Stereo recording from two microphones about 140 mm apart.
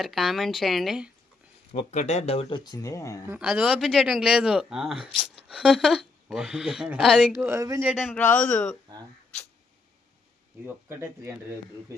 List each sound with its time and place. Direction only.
0.0 s speech: centre (ahead or behind)
1.9 s speech: 50° left (ahead or behind)
2.6 s speech: 30° left (ahead or behind)
3.3 s speech: 5° right (ahead or behind)
7.4 s speech: 20° right (ahead or behind)
7.8 s speech: 5° right (ahead or behind)
8.1 s a man's voice: 10° left (ahead or behind)
10.7 s speech: 20° right (ahead or behind)